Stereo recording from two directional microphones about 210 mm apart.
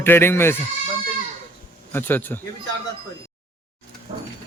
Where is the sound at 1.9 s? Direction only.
10° left (ahead or behind).